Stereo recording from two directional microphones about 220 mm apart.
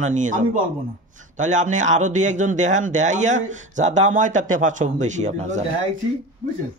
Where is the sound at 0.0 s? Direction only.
35° right (ahead or behind).